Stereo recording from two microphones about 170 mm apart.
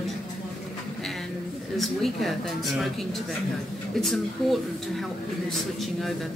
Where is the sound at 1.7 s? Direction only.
Centre (ahead or behind).